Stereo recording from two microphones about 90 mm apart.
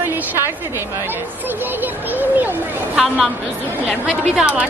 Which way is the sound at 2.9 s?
5° right (ahead or behind).